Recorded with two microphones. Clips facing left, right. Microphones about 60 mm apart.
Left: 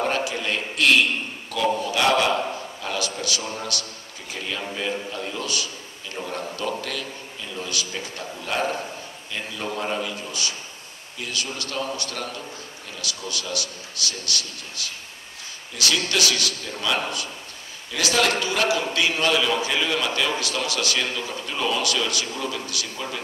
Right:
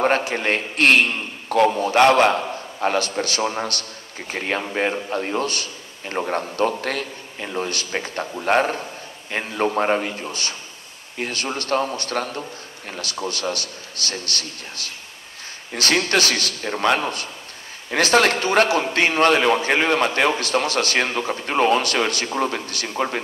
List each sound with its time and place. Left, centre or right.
0.0 s a man's voice: right